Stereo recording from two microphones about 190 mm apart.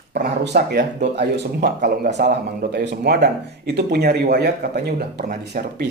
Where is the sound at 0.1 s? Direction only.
60° right (ahead or behind).